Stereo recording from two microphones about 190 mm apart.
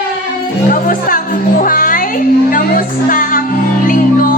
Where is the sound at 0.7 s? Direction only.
45° left (ahead or behind).